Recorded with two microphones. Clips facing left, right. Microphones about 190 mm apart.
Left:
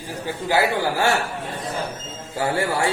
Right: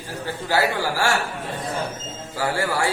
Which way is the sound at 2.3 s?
20° left (ahead or behind).